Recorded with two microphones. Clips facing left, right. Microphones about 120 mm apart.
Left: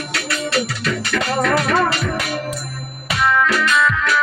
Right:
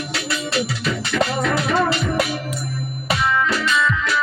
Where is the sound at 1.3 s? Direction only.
50° left (ahead or behind).